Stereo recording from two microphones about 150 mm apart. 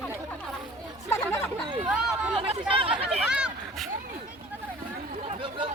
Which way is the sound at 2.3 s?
40° right (ahead or behind).